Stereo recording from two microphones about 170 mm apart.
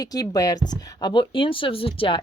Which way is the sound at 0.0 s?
20° left (ahead or behind).